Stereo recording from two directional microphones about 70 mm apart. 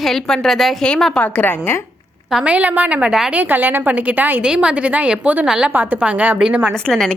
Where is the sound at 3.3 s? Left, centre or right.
Right.